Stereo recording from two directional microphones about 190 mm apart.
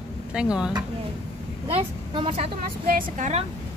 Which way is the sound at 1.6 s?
25° right (ahead or behind).